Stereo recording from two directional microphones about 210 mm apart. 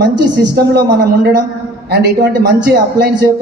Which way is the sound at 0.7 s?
55° right (ahead or behind).